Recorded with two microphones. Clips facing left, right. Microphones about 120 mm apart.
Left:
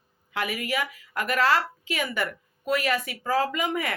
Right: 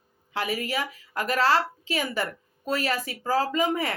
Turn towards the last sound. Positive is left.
turn(degrees=-35)  # may be behind; listen again after turning